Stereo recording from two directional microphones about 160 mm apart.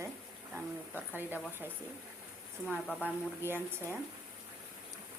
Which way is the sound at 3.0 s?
15° right (ahead or behind).